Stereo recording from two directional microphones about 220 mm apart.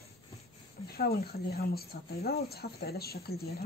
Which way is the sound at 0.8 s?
45° left (ahead or behind).